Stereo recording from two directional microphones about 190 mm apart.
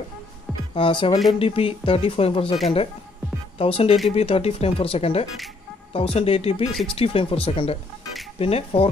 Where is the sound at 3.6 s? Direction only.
30° left (ahead or behind).